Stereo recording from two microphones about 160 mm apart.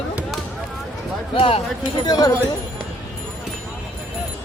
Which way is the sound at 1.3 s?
35° left (ahead or behind).